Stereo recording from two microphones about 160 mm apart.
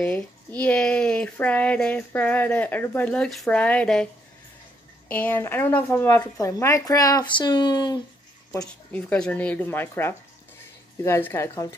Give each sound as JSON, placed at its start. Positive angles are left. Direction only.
{"t": 0.0, "sound": "speech", "side_deg": 10}
{"t": 8.9, "sound": "speech", "side_deg": 10}